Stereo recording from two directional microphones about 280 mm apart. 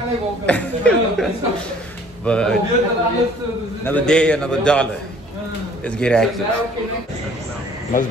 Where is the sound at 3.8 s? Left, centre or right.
Centre.